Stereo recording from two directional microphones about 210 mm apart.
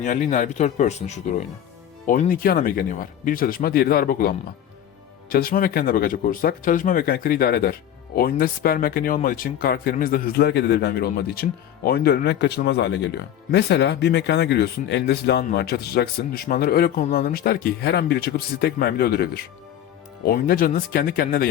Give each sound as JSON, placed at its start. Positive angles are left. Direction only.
{"t": 0.0, "sound": "speech", "side_deg": 35}